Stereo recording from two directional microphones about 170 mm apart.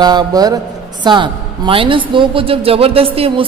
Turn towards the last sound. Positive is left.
turn(degrees=-35)  # may be behind; listen again after turning